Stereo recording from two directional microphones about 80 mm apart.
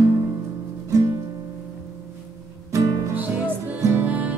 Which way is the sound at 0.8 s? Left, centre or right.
Right.